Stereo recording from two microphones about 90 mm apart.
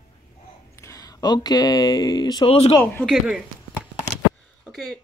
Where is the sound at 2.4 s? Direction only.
90° left.